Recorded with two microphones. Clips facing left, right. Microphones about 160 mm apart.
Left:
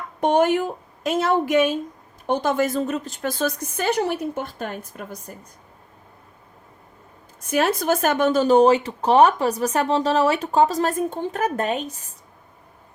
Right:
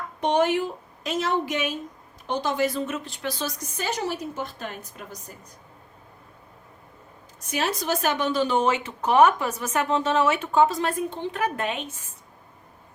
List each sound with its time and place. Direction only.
0.2 s a woman's voice: 50° left (ahead or behind)
7.4 s speech: 50° left (ahead or behind)